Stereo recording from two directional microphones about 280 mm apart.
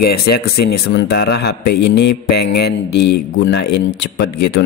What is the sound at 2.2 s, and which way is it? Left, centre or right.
Mantra, left.